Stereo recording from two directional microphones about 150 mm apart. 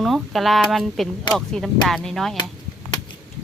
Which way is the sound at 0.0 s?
Centre (ahead or behind).